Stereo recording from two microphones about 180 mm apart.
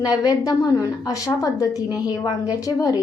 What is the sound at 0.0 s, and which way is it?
A woman's voice, 20° left (ahead or behind).